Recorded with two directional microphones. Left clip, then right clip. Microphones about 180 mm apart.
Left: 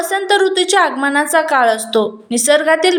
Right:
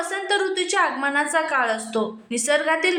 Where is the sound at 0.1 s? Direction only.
30° left (ahead or behind).